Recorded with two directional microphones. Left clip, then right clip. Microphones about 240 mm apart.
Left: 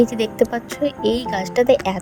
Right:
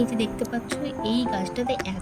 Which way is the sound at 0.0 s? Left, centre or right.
Centre.